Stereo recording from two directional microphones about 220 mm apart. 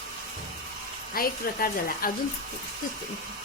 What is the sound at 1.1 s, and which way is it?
Speech, 40° left (ahead or behind).